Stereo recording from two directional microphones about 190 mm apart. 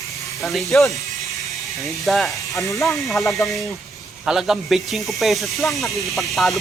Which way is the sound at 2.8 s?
Centre (ahead or behind).